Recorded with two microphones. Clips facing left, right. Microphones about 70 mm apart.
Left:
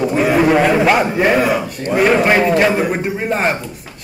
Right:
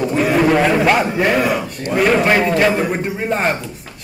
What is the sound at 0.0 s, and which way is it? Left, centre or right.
A man's voice, centre.